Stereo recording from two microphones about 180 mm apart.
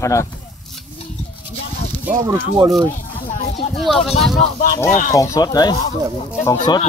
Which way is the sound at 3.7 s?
Centre (ahead or behind).